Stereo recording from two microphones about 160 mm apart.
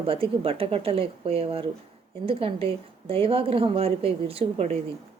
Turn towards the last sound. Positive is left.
turn(degrees=-40)  # may be behind; listen again after turning